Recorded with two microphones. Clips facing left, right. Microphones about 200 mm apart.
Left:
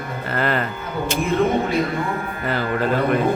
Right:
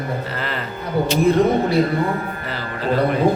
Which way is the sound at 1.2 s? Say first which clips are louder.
Right 3 dB; 35° right (ahead or behind).